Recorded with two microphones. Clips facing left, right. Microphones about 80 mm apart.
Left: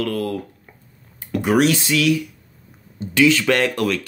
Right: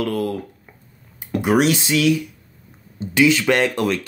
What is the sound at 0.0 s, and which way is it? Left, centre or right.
Speech, right.